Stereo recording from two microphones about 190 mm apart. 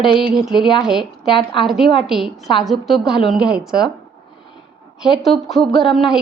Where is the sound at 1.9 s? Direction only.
Centre (ahead or behind).